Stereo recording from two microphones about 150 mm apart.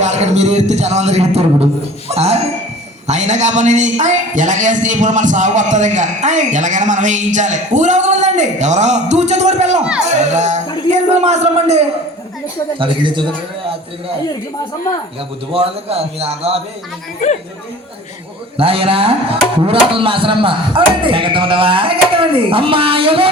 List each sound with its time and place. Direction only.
0.0 s a man's voice: 50° right (ahead or behind)
12.8 s tabla: 35° right (ahead or behind)
15.5 s tabla: 40° right (ahead or behind)
17.2 s speech: 50° left (ahead or behind)
18.5 s tabla: 40° right (ahead or behind)